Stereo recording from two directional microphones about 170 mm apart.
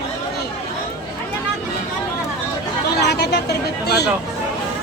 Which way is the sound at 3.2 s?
70° left (ahead or behind).